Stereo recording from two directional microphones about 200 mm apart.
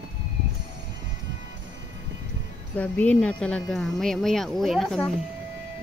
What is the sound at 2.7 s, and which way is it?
Speech, 5° left (ahead or behind).